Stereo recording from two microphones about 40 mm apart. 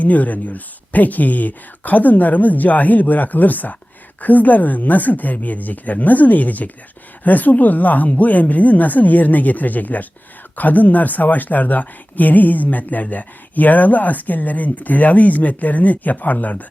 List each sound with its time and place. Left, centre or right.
0.0 s speech: left